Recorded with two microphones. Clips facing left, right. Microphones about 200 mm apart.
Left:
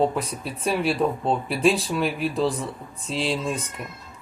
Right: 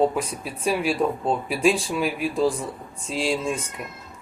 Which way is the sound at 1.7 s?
35° left (ahead or behind).